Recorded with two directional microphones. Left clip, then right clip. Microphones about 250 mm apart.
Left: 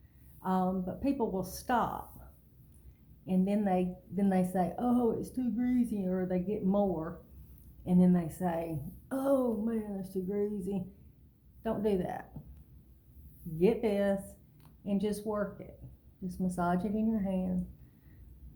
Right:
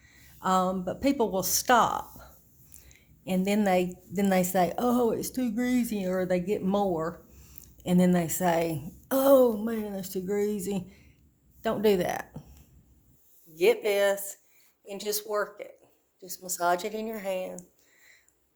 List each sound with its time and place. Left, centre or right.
0.3 s a woman's voice: right
3.2 s a woman's voice: right
13.6 s a woman's voice: right